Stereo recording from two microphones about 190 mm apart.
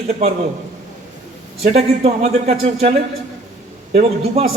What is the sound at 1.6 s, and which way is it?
A man's voice, 35° right (ahead or behind).